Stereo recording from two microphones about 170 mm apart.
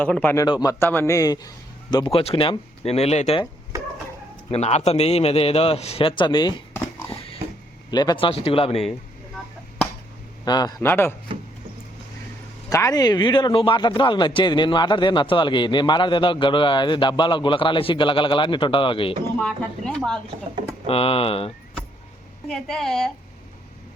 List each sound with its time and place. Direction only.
0.0 s a man's voice: 10° left (ahead or behind)
0.4 s speech: 25° left (ahead or behind); by 3.4 s 40° left (ahead or behind)
4.5 s a man's voice: 40° left (ahead or behind); by 6.6 s 25° left (ahead or behind)
7.9 s a man's voice: 25° left (ahead or behind)
10.4 s speech: 25° left (ahead or behind)
10.8 s a man's voice: 15° left (ahead or behind)
12.7 s speech: 20° left (ahead or behind)
19.4 s a woman's voice: 5° left (ahead or behind)
20.8 s a man's voice: 35° left (ahead or behind)
22.4 s a woman's voice: 5° left (ahead or behind)